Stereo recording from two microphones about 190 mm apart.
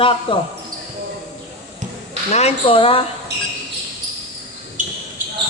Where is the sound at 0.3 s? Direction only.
30° left (ahead or behind).